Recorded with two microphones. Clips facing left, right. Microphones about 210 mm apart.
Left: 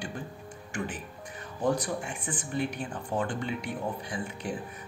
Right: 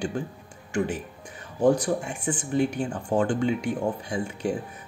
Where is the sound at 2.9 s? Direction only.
75° right (ahead or behind).